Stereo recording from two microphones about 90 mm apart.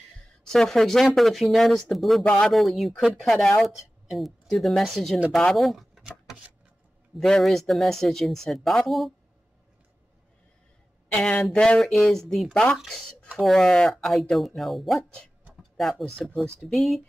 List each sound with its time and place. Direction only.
0.5 s speech: 5° left (ahead or behind)
2.2 s speech: 10° left (ahead or behind)
2.5 s speech: centre (ahead or behind)
7.2 s speech: 5° left (ahead or behind)
11.1 s speech: 15° left (ahead or behind)